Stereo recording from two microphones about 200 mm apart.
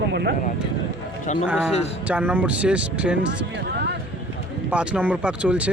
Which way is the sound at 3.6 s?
55° right (ahead or behind).